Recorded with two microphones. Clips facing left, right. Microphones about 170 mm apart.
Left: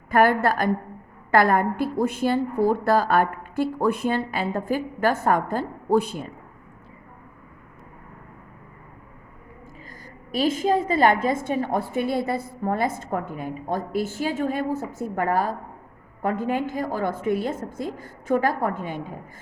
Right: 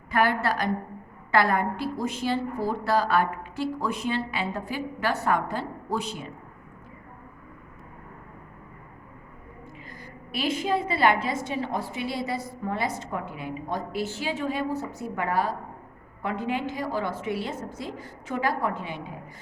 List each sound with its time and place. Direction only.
0.1 s a woman's voice: 50° left (ahead or behind)
10.3 s a woman's voice: 45° left (ahead or behind)